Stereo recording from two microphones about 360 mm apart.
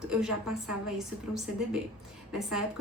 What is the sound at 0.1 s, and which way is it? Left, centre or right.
A woman's voice, centre.